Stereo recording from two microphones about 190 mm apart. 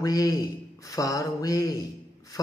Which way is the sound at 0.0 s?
20° left (ahead or behind).